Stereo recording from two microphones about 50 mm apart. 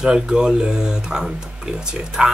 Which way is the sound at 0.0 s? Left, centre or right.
Centre.